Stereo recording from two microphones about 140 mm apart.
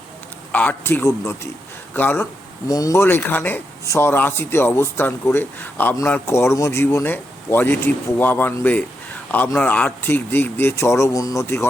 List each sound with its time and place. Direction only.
0.5 s speech: 10° left (ahead or behind)
2.6 s speech: 25° left (ahead or behind)